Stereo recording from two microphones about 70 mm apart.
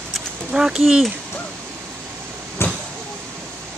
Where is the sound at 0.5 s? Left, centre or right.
Centre.